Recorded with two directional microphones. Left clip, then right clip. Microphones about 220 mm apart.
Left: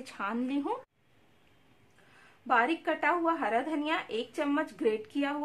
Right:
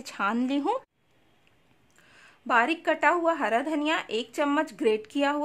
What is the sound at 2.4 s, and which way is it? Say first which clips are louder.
A woman's voice: right 4 dB; 50° right (ahead or behind).